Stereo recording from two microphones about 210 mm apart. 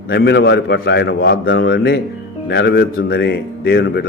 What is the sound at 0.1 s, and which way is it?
A man's voice, 55° left (ahead or behind).